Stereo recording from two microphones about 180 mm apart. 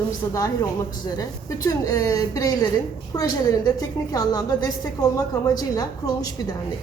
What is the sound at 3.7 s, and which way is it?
Speech, 20° left (ahead or behind).